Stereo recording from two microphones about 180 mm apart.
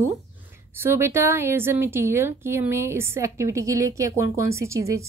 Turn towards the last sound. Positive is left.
turn(degrees=-15)  # may be behind; listen again after turning